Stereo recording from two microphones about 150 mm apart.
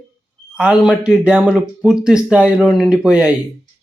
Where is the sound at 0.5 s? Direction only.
5° right (ahead or behind).